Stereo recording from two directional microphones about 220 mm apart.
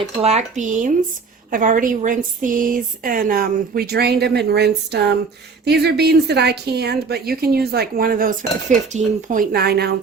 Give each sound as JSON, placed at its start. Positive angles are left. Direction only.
{"t": 0.2, "sound": "a woman's voice", "side_deg": -30}